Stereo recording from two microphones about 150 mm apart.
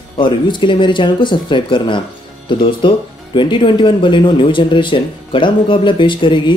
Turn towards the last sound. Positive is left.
turn(degrees=35)  # may be behind; listen again after turning